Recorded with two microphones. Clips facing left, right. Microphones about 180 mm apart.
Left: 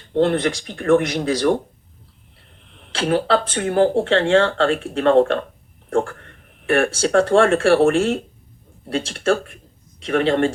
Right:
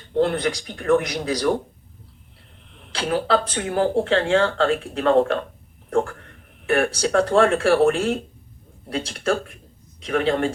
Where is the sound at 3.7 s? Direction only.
30° left (ahead or behind).